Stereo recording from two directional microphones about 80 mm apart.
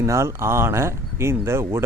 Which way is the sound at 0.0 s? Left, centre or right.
Right.